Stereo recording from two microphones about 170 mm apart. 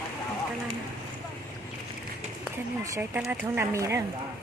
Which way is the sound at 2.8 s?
15° right (ahead or behind).